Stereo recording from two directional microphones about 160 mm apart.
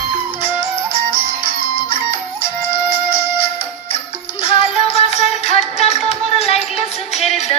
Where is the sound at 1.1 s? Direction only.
30° left (ahead or behind).